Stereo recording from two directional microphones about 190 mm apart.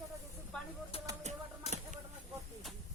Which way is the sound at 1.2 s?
35° right (ahead or behind).